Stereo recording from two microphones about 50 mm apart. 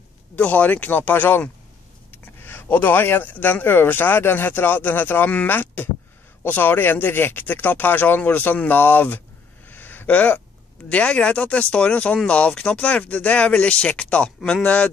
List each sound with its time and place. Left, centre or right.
0.4 s speech: left
9.7 s a sound: left
10.9 s speech: left